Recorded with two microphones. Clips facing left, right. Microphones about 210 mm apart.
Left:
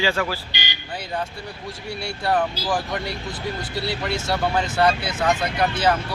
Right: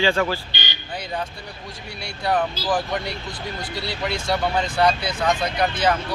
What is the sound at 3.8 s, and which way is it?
Speech, 5° left (ahead or behind).